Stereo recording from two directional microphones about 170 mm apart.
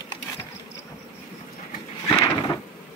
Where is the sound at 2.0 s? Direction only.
20° left (ahead or behind).